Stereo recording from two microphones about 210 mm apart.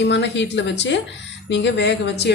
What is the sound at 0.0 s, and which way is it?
A woman's voice, 60° left (ahead or behind).